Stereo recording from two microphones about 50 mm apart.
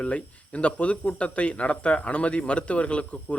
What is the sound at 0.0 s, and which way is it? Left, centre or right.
Speech, left.